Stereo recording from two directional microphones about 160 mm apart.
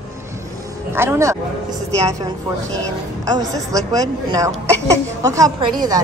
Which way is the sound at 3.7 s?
25° right (ahead or behind).